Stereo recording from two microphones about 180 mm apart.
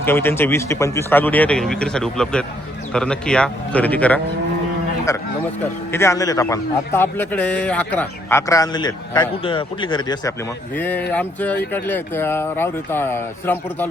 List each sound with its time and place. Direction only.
0.0 s a man's voice: 10° left (ahead or behind)
10.8 s a man's voice: 10° left (ahead or behind)